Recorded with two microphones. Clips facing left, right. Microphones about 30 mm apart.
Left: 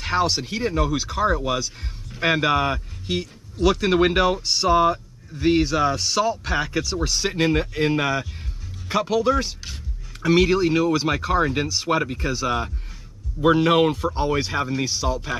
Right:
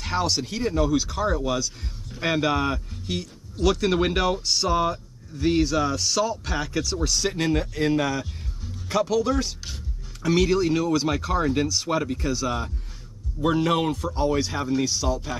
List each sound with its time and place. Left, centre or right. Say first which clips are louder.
0.0 s speech: left 3 dB; centre